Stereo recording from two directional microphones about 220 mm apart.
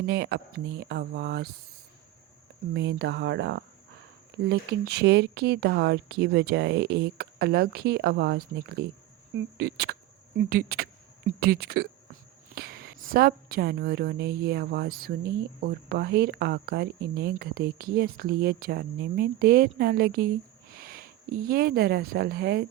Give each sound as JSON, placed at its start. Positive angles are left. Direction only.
{"t": 0.0, "sound": "a woman's voice", "side_deg": -45}
{"t": 2.7, "sound": "a woman's voice", "side_deg": -50}